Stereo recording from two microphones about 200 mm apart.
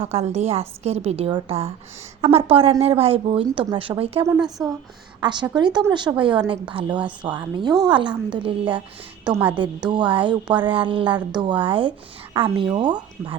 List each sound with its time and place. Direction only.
0.0 s a woman's voice: 30° right (ahead or behind)
4.4 s speech: centre (ahead or behind)
5.2 s a woman's voice: 20° right (ahead or behind)
9.2 s a woman's voice: 10° right (ahead or behind)
9.9 s speech: 25° right (ahead or behind)